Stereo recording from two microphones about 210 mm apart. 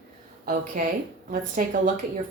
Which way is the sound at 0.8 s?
40° right (ahead or behind).